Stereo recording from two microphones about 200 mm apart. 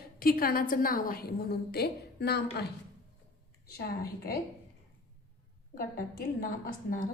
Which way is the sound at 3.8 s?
50° left (ahead or behind).